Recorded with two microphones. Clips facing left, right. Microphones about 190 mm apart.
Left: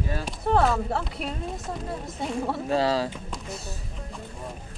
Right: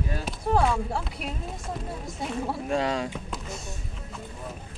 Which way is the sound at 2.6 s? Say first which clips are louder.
Left 3 dB; 30° left (ahead or behind).